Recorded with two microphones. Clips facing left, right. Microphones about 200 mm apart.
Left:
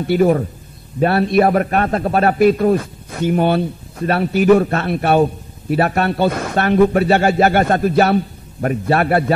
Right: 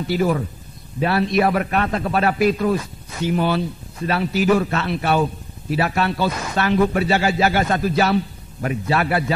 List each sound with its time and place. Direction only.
0.0 s a man's voice: 55° left (ahead or behind)